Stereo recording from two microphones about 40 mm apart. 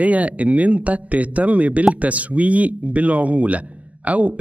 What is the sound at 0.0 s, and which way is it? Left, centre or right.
Speech, right.